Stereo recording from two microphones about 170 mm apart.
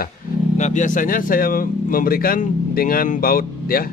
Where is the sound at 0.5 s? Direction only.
45° left (ahead or behind).